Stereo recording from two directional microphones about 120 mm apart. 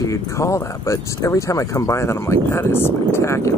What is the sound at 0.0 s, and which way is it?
Speech, 25° left (ahead or behind).